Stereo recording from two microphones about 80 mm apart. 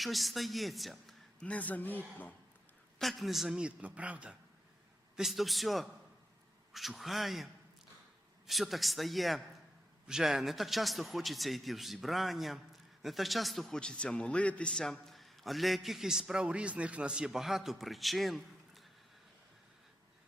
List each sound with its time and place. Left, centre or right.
0.0 s a man's voice: centre
1.4 s speech: centre
3.0 s a man's voice: centre
5.1 s a man's voice: centre